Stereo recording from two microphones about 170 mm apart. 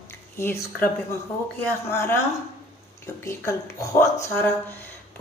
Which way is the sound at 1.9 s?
15° left (ahead or behind).